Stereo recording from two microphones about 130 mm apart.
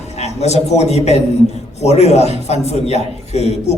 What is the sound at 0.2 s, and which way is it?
A man's voice, 55° left (ahead or behind).